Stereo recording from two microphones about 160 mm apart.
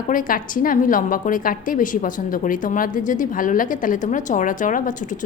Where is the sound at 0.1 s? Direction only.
60° left (ahead or behind).